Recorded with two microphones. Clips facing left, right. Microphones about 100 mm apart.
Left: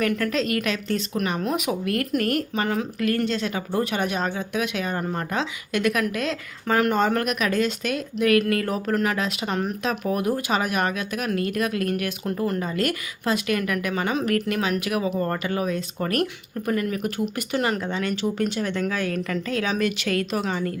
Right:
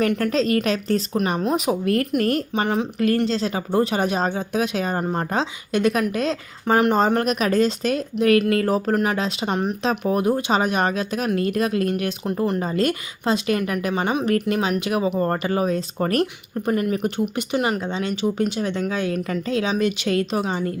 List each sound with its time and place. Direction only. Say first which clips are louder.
0.0 s speech: right 3 dB; 30° right (ahead or behind)